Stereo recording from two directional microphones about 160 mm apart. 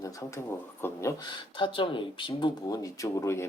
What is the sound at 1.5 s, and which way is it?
Speech, 30° left (ahead or behind).